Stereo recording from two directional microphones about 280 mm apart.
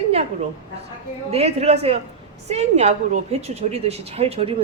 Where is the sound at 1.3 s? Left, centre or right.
Right.